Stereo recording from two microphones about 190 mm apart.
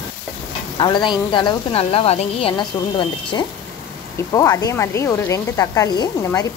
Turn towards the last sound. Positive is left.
turn(degrees=20)  # may be behind; listen again after turning